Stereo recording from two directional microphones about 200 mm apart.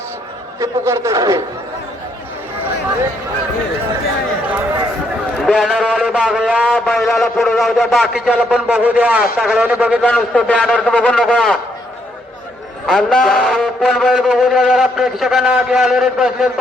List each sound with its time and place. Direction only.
0.6 s a man's voice: 15° right (ahead or behind)
5.4 s a man's voice: 5° left (ahead or behind)
10.0 s a man's voice: 5° left (ahead or behind)
12.8 s a man's voice: centre (ahead or behind)